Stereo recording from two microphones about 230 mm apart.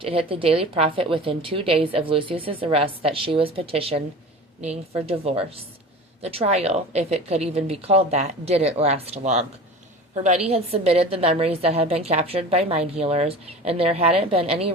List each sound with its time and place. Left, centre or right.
0.0 s a woman's voice: right
10.5 s a woman's voice: right